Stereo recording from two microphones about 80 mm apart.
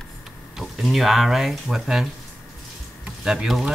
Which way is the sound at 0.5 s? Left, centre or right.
Centre.